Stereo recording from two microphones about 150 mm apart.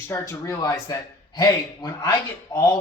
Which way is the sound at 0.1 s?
20° left (ahead or behind).